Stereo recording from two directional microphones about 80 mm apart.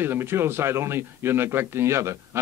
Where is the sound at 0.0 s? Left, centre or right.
Right.